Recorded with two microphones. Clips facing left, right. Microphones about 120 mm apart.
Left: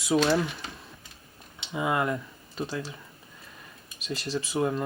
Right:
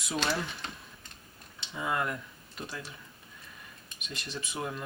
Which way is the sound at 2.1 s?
30° left (ahead or behind).